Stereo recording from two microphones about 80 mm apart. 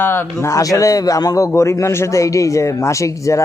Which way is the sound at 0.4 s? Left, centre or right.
Left.